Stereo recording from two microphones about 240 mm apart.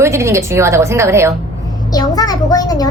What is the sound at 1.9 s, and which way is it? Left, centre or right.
Speech, centre.